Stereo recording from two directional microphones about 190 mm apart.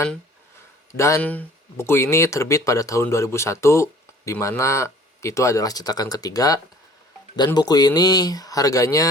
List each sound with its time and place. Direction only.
0.9 s speech: 15° left (ahead or behind)